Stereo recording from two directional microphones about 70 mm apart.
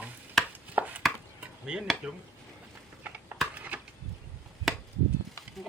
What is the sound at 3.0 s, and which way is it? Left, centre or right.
Typing, right.